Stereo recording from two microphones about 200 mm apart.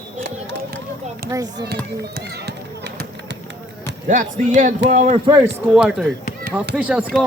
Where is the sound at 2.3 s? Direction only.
55° right (ahead or behind).